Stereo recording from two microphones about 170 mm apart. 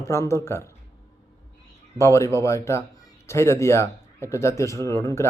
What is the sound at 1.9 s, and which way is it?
A man's voice, 15° left (ahead or behind).